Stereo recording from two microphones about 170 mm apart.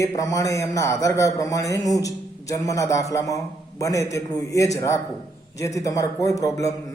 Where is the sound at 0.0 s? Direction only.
20° left (ahead or behind).